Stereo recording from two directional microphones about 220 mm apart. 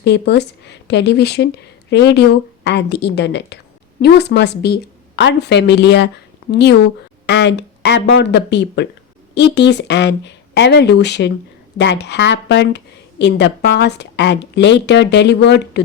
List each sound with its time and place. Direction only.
0.0 s a woman's voice: 50° left (ahead or behind)